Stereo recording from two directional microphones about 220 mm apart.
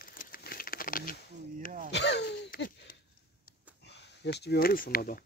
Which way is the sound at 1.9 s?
50° left (ahead or behind).